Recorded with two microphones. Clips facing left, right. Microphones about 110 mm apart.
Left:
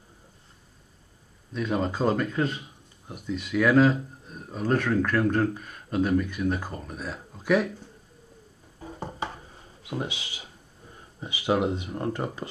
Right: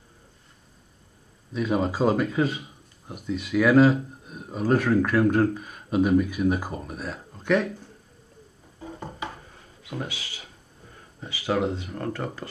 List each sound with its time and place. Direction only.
1.5 s a man's voice: 5° right (ahead or behind)
9.8 s speech: 20° left (ahead or behind)